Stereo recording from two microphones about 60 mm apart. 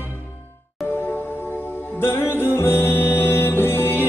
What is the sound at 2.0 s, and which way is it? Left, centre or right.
Music, left.